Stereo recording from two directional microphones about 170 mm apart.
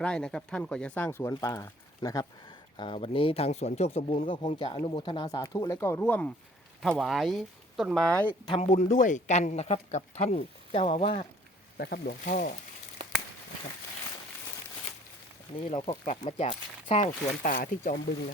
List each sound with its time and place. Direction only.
0.0 s speech: 5° left (ahead or behind)
2.7 s speech: 30° left (ahead or behind); by 8.3 s 5° left (ahead or behind)
8.4 s speech: 35° left (ahead or behind)
8.8 s speech: 50° left (ahead or behind)
11.8 s speech: 70° left (ahead or behind)
15.6 s speech: 35° left (ahead or behind); by 17.9 s 55° left (ahead or behind)